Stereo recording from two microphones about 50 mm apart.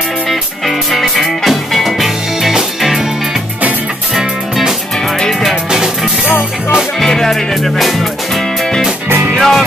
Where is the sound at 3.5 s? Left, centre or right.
Right.